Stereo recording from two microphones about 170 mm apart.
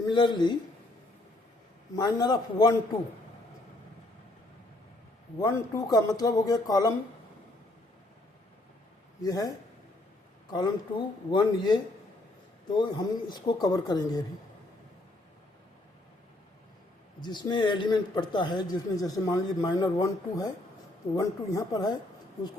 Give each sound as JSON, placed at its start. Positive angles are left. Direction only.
{"t": 0.1, "sound": "speech", "side_deg": 25}
{"t": 2.0, "sound": "speech", "side_deg": 25}
{"t": 5.4, "sound": "speech", "side_deg": 20}
{"t": 9.2, "sound": "speech", "side_deg": 20}
{"t": 10.5, "sound": "speech", "side_deg": 25}
{"t": 17.2, "sound": "speech", "side_deg": 25}